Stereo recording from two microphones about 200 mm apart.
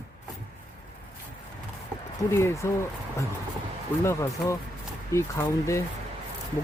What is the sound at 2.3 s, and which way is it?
Speech, 15° left (ahead or behind).